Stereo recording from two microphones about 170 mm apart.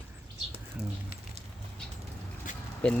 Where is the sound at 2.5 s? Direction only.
50° left (ahead or behind).